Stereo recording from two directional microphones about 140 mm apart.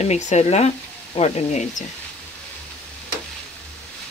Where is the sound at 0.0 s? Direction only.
55° left (ahead or behind).